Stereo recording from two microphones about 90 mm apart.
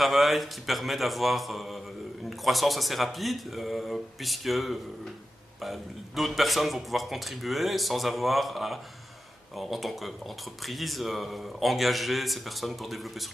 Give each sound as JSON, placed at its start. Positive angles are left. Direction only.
{"t": 0.0, "sound": "speech", "side_deg": 0}